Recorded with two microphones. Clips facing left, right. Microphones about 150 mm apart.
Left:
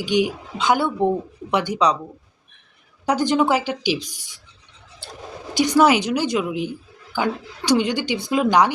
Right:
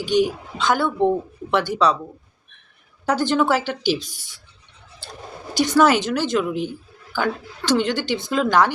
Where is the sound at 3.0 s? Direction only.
15° left (ahead or behind).